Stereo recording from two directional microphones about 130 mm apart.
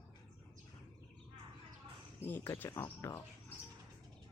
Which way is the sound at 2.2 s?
20° left (ahead or behind).